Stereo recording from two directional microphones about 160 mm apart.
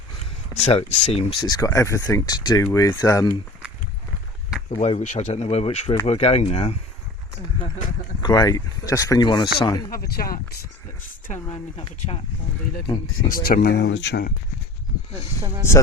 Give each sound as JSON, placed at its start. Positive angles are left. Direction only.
{"t": 0.5, "sound": "speech", "side_deg": 40}
{"t": 1.5, "sound": "speech", "side_deg": 20}
{"t": 4.7, "sound": "speech", "side_deg": 45}
{"t": 8.2, "sound": "speech", "side_deg": 25}
{"t": 9.9, "sound": "speech", "side_deg": 70}
{"t": 11.4, "sound": "speech", "side_deg": 40}
{"t": 13.3, "sound": "speech", "side_deg": 70}